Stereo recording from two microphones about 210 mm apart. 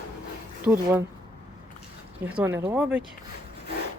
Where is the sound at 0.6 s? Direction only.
10° right (ahead or behind).